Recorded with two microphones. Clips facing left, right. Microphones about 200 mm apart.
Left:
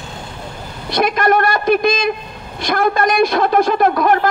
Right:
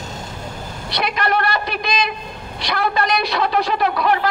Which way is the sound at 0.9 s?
50° left (ahead or behind).